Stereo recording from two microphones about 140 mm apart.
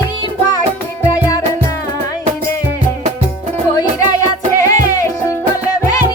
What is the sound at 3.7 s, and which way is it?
Music, 25° left (ahead or behind).